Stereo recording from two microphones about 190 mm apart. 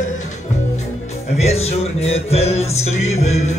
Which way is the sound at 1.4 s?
35° left (ahead or behind).